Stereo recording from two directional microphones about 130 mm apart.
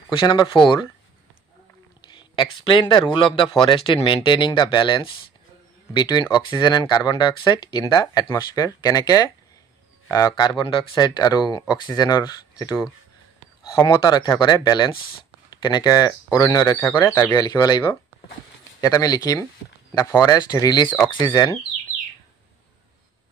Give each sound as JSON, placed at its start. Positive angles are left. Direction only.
{"t": 0.1, "sound": "speech", "side_deg": 35}
{"t": 2.0, "sound": "a man's voice", "side_deg": 35}
{"t": 13.8, "sound": "a man's voice", "side_deg": 35}
{"t": 17.4, "sound": "a man's voice", "side_deg": 30}